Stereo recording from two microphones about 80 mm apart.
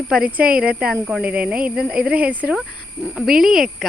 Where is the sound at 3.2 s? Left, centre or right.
Centre.